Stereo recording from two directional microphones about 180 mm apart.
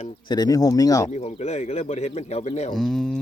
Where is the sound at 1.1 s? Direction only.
40° left (ahead or behind).